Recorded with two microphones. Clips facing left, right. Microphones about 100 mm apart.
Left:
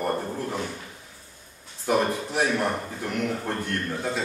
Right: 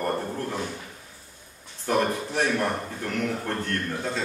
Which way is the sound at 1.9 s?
10° left (ahead or behind).